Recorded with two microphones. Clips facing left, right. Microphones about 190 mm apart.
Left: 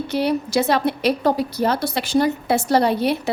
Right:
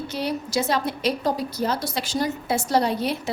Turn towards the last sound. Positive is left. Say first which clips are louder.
# left 4 dB
turn(degrees=65)  # may be behind; listen again after turning